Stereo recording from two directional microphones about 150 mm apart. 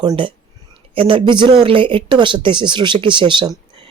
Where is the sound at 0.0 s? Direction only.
25° right (ahead or behind).